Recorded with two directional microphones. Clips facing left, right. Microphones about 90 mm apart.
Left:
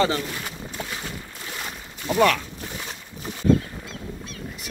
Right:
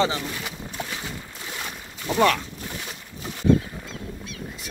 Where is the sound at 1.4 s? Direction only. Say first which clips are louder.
Even; centre (ahead or behind).